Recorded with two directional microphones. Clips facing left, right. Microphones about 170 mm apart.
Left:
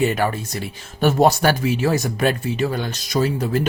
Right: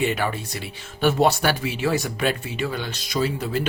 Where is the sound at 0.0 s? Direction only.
45° left (ahead or behind).